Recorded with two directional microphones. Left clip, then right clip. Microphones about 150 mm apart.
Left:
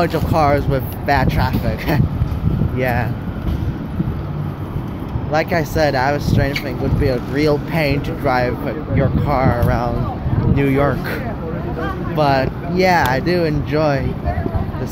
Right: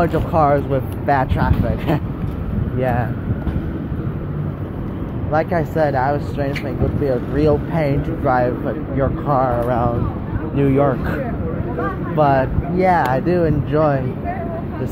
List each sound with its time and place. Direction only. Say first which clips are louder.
0.0 s speech: even; 15° left (ahead or behind)
5.3 s speech: left 1 dB; 20° left (ahead or behind)
9.7 s speech: right 1 dB; centre (ahead or behind)
12.2 s speech: right 1 dB; 10° left (ahead or behind)
12.7 s speech: left 1 dB; 25° left (ahead or behind)
13.1 s speech: even; 10° left (ahead or behind)